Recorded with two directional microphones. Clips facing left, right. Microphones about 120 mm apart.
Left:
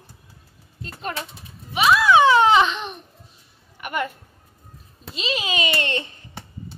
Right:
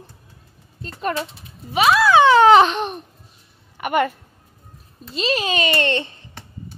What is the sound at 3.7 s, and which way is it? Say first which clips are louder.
Speech: right 7 dB; 80° right.